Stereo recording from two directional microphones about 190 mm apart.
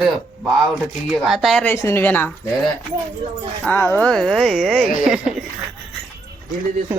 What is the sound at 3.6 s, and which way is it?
Speech, 10° left (ahead or behind).